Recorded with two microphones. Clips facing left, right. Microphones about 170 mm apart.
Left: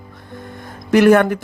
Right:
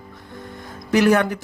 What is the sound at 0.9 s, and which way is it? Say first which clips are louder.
Speech: left 5 dB; 55° left (ahead or behind).